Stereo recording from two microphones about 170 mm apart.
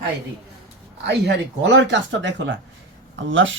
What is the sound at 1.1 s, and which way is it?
Speech, 90° right.